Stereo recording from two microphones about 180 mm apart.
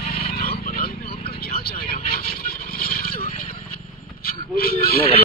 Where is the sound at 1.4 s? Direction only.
60° left (ahead or behind).